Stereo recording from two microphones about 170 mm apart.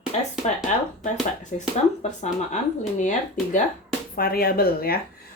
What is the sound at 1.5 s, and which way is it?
Speech, 50° left (ahead or behind).